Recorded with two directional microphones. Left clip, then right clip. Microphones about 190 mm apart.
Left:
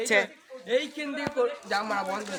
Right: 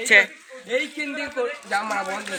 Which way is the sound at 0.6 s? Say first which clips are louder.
Right 3 dB; 25° left (ahead or behind).